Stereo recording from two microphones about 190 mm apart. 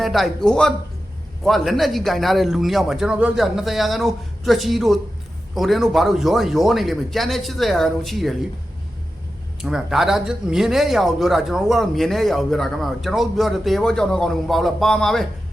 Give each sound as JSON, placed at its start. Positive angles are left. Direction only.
{"t": 0.0, "sound": "speech", "side_deg": 0}
{"t": 9.6, "sound": "speech", "side_deg": 0}